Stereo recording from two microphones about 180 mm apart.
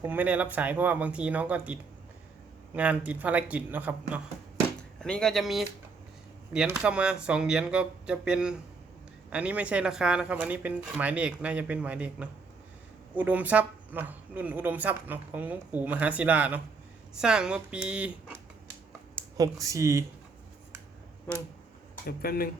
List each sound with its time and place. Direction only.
0.0 s speech: 10° right (ahead or behind)
4.9 s speech: 5° left (ahead or behind)
6.7 s speech: 5° right (ahead or behind)
19.4 s speech: 20° right (ahead or behind)
21.3 s speech: 10° left (ahead or behind)
22.0 s speech: 55° left (ahead or behind)